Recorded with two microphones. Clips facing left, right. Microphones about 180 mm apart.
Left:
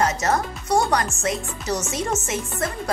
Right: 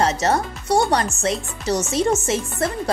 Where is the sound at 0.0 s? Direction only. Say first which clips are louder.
Right 2 dB; 30° right (ahead or behind).